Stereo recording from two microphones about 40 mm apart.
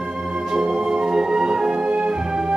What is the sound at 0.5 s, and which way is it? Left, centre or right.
Music, right.